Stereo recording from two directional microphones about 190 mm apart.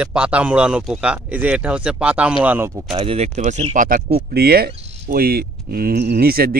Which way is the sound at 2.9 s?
30° right (ahead or behind).